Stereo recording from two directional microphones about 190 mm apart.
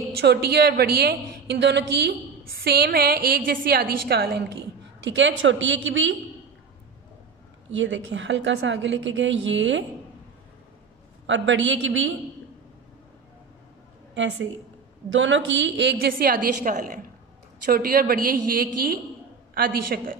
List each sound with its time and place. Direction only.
0.2 s a woman's voice: 60° right (ahead or behind)
5.0 s a woman's voice: 70° right (ahead or behind); by 6.1 s 90° right
7.7 s a woman's voice: 80° right
11.2 s a woman's voice: 80° right
14.1 s a woman's voice: 75° right (ahead or behind); by 20.2 s 50° right (ahead or behind)